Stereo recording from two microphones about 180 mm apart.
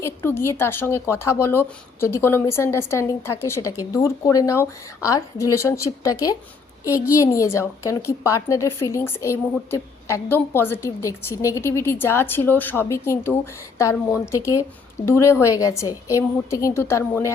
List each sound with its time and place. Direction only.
0.0 s a woman's voice: 15° left (ahead or behind)